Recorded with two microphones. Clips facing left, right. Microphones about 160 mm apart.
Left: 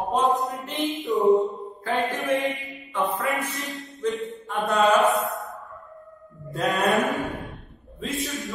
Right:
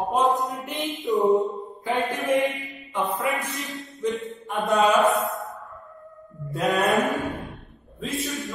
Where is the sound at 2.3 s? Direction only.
15° right (ahead or behind).